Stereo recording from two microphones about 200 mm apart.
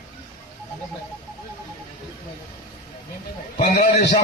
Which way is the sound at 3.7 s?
50° left (ahead or behind).